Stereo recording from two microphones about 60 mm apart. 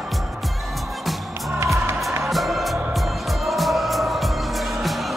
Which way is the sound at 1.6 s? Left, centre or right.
Right.